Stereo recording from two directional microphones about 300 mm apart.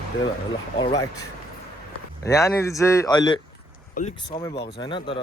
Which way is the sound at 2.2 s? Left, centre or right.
Centre.